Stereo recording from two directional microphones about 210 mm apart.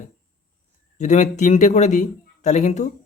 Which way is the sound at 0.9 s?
35° left (ahead or behind).